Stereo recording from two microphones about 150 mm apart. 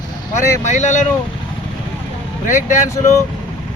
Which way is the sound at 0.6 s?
50° left (ahead or behind).